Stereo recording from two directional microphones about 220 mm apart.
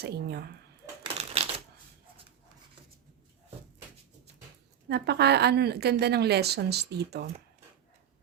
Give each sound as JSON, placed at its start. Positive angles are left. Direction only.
{"t": 0.0, "sound": "a woman's voice", "side_deg": -45}
{"t": 1.0, "sound": "typewriter", "side_deg": -25}
{"t": 4.9, "sound": "a woman's voice", "side_deg": -50}